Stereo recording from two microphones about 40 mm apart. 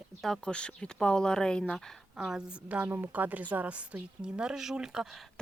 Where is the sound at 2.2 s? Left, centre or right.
Centre.